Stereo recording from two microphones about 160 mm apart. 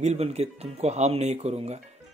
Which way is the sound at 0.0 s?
40° right (ahead or behind).